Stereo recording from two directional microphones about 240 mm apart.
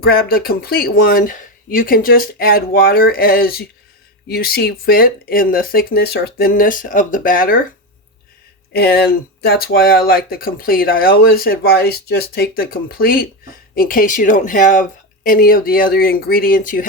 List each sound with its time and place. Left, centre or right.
0.0 s speech: left
8.7 s speech: left